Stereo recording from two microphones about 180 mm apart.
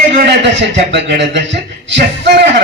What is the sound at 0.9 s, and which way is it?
A man's voice, 70° right (ahead or behind).